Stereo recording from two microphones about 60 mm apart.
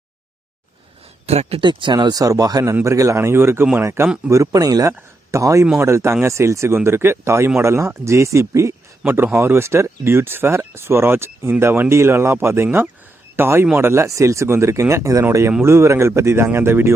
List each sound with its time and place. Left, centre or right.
2.1 s speech: right
2.8 s speech: right
3.2 s speech: right
4.3 s speech: right
5.3 s speech: right
5.8 s speech: right
6.7 s speech: right
9.0 s speech: right